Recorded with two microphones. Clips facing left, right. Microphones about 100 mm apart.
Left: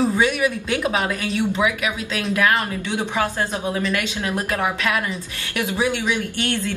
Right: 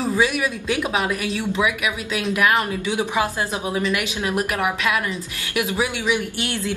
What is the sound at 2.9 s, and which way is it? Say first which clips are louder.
Speech: even; 15° right (ahead or behind).